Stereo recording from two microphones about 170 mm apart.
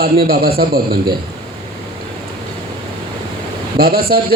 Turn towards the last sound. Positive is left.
turn(degrees=-65)  # may be behind; listen again after turning